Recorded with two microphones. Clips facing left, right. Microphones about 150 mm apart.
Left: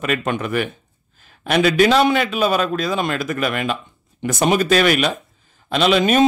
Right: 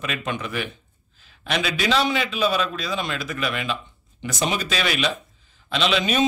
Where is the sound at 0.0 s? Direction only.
50° left (ahead or behind).